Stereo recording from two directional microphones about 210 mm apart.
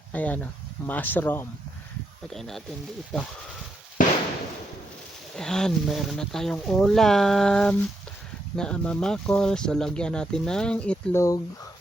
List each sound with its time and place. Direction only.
0.1 s speech: 5° left (ahead or behind)
4.0 s firecracker: 40° left (ahead or behind)
5.4 s speech: 5° left (ahead or behind)